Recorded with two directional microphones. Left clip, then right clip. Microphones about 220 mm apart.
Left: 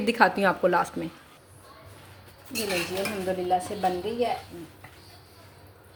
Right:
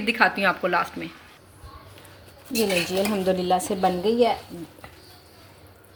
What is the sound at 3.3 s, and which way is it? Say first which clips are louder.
A woman's voice: right 2 dB; 45° right (ahead or behind).